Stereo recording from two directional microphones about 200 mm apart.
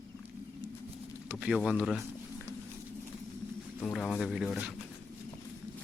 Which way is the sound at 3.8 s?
5° left (ahead or behind).